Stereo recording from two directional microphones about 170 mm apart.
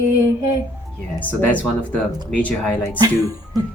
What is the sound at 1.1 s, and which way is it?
Speech, 10° left (ahead or behind).